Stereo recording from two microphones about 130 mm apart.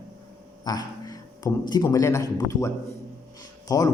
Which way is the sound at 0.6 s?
30° left (ahead or behind).